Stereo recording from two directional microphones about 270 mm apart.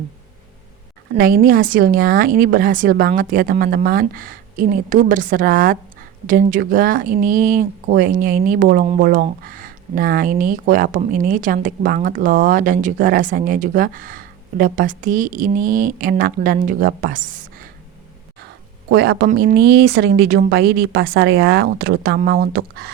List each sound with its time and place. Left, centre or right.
1.1 s a woman's voice: right
18.9 s a woman's voice: right